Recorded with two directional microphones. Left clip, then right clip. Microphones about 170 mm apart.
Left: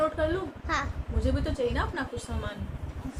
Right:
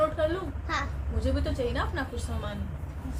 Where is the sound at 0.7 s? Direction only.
50° left (ahead or behind).